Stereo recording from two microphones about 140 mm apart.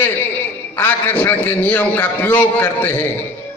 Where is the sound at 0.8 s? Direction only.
15° left (ahead or behind).